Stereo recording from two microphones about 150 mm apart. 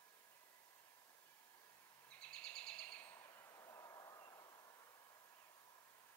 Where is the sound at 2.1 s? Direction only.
5° left (ahead or behind); by 4.7 s 20° left (ahead or behind).